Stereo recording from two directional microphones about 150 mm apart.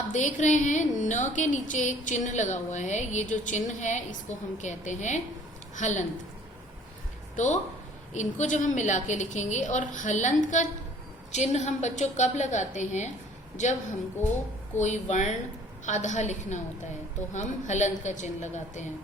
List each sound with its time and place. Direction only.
0.1 s a woman's voice: 55° left (ahead or behind)
7.3 s a woman's voice: 50° left (ahead or behind)
14.8 s a woman's voice: 55° left (ahead or behind)